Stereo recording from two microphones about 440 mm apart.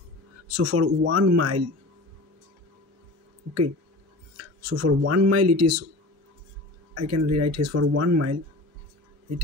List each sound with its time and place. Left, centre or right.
0.5 s speech: right
4.4 s speech: right
6.9 s speech: right